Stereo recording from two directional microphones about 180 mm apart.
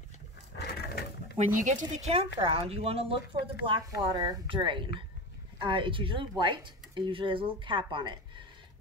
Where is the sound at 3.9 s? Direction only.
20° right (ahead or behind).